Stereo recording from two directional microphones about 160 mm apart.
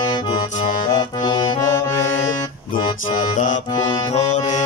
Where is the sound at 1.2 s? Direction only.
30° left (ahead or behind).